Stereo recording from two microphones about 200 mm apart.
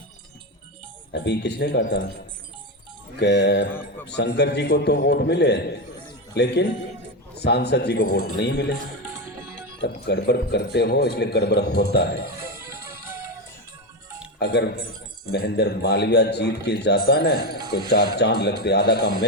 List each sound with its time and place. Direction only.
1.1 s a man's voice: 55° left (ahead or behind)
3.2 s a man's voice: 55° left (ahead or behind)
9.0 s music: 10° right (ahead or behind)
9.8 s a man's voice: 55° left (ahead or behind)
12.6 s music: 15° right (ahead or behind)
14.3 s a man's voice: 55° left (ahead or behind)